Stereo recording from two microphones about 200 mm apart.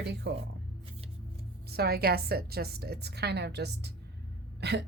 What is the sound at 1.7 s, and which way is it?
A woman's voice, 50° right (ahead or behind).